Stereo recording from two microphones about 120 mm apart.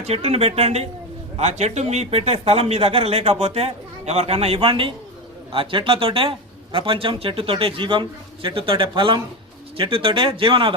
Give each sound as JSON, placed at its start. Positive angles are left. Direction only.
{"t": 0.0, "sound": "speech", "side_deg": -55}